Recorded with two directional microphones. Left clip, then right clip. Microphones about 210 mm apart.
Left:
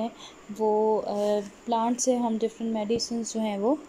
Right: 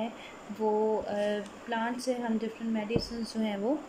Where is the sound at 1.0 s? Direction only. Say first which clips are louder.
Left 5 dB; 20° left (ahead or behind).